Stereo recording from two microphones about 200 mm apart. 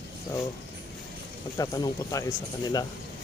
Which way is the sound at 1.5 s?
15° left (ahead or behind).